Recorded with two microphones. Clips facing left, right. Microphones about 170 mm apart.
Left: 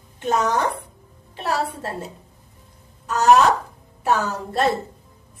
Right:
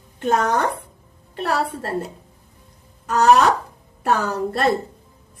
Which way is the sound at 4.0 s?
60° right (ahead or behind).